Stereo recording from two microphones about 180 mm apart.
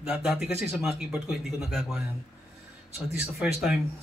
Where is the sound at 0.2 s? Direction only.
Centre (ahead or behind).